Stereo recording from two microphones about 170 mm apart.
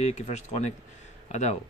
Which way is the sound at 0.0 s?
40° left (ahead or behind).